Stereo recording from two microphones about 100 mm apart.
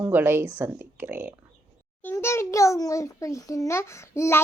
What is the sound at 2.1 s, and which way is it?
A child's voice, 25° left (ahead or behind).